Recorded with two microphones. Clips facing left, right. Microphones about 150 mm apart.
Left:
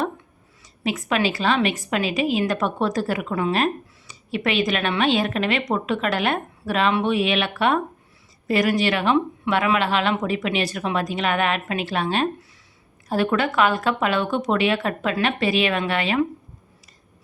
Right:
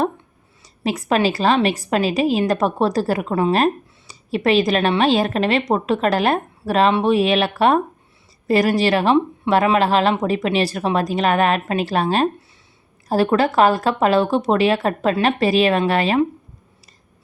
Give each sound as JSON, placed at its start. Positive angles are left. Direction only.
{"t": 0.6, "sound": "a woman's voice", "side_deg": -35}